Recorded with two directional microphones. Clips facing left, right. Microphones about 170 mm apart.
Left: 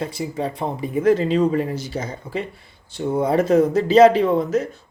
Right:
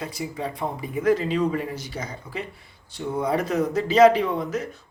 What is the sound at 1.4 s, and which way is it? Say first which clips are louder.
Speech: left 5 dB; 40° left (ahead or behind).